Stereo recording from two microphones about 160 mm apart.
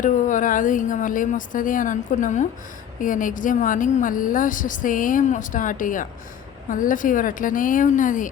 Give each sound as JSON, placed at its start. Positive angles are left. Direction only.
{"t": 0.0, "sound": "a woman's voice", "side_deg": 55}